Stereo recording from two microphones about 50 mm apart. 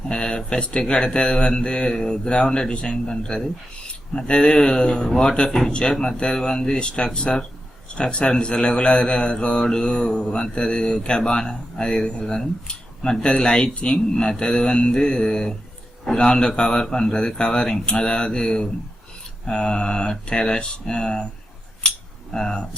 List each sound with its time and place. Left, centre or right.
0.1 s speech: centre
5.5 s speech: centre
5.7 s speech: centre
21.8 s a sound: centre